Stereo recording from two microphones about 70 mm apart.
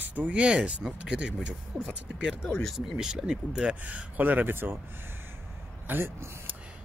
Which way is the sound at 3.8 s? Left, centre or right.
Right.